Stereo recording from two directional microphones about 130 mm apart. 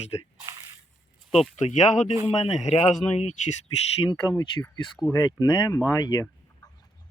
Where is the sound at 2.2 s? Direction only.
55° left (ahead or behind).